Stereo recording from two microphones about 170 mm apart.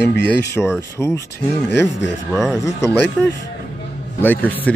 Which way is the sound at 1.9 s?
90° left.